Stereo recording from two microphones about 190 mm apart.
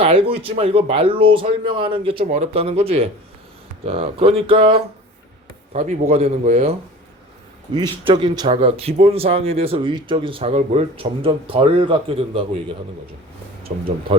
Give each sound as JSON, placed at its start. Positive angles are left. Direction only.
{"t": 0.0, "sound": "a man's voice", "side_deg": -30}